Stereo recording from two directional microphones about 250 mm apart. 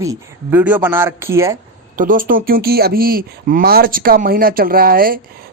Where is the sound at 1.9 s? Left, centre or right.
Right.